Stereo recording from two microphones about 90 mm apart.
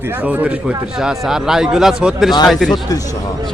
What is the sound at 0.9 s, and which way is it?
Speech, 5° right (ahead or behind).